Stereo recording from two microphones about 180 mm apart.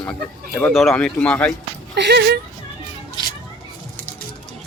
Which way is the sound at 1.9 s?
65° right (ahead or behind).